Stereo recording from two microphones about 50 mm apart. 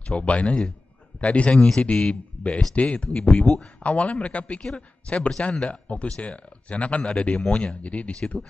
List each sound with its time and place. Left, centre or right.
0.0 s speech: left
3.1 s speech: centre